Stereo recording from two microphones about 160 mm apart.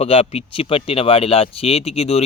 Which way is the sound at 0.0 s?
40° left (ahead or behind).